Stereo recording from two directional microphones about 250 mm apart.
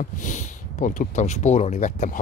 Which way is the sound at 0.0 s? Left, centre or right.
Left.